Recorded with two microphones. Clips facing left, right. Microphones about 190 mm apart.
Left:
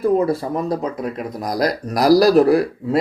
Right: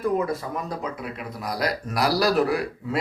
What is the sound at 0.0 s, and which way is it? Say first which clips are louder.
Speech: left 7 dB; 30° left (ahead or behind).